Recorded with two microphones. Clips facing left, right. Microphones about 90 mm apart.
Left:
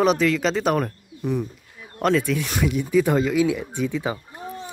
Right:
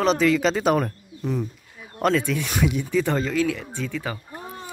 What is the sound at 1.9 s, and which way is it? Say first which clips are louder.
Speech: left 1 dB; centre (ahead or behind).